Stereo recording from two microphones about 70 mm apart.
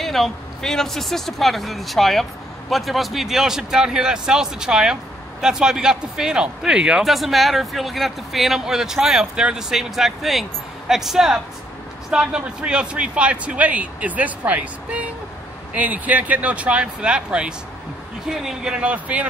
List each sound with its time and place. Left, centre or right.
0.0 s a man's voice: centre